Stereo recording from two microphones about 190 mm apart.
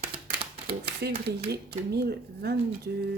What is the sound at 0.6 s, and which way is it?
Speech, 55° right (ahead or behind).